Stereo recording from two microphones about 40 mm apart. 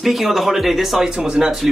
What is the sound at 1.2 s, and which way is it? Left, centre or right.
Speech, centre.